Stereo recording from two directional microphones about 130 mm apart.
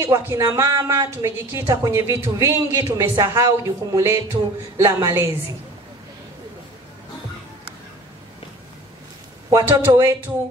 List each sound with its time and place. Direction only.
0.0 s a woman's voice: 25° right (ahead or behind)
9.5 s a woman's voice: 20° right (ahead or behind)